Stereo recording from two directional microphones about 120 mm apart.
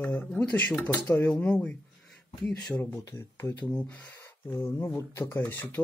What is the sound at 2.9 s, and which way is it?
Speech, 25° left (ahead or behind).